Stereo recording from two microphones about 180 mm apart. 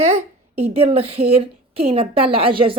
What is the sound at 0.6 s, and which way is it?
A woman's voice, 35° right (ahead or behind).